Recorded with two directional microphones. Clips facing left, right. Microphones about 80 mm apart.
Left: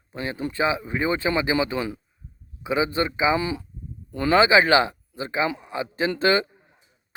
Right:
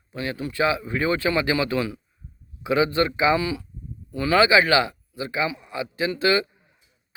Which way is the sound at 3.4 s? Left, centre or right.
Left.